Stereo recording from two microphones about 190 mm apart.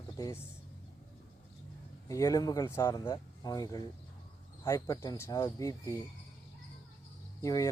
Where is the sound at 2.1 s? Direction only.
20° left (ahead or behind).